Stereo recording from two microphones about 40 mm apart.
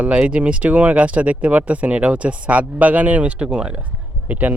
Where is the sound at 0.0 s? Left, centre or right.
Right.